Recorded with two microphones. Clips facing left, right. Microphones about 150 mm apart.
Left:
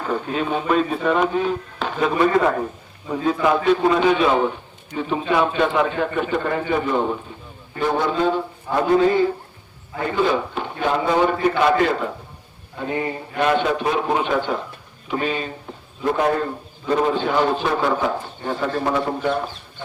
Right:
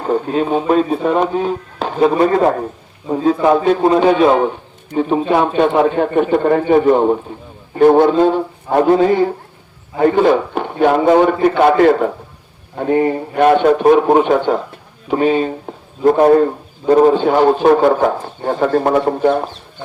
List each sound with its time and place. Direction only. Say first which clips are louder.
0.0 s a man's voice: right 7 dB; 35° right (ahead or behind)